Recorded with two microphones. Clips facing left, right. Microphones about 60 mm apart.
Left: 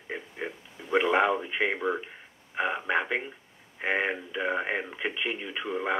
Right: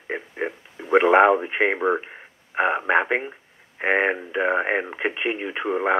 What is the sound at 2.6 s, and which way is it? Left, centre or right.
Speech, right.